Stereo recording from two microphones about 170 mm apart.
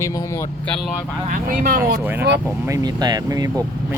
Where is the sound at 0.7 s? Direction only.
5° left (ahead or behind).